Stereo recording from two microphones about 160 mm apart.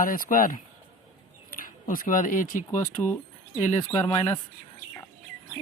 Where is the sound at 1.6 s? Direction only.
60° left (ahead or behind).